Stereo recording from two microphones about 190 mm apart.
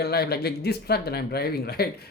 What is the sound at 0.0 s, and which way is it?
Speech, 55° left (ahead or behind).